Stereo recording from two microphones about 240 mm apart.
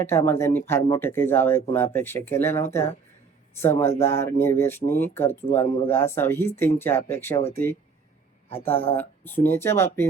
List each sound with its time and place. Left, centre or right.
0.0 s speech: centre
8.4 s speech: left
9.0 s speech: centre